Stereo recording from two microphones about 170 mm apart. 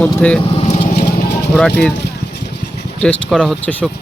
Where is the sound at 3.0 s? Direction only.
Centre (ahead or behind).